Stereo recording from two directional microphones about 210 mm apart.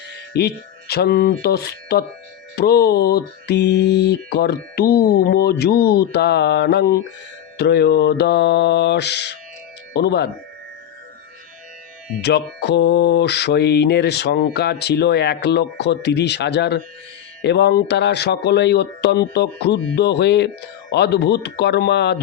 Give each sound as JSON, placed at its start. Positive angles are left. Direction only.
{"t": 0.1, "sound": "speech", "side_deg": 50}
{"t": 12.5, "sound": "speech", "side_deg": 50}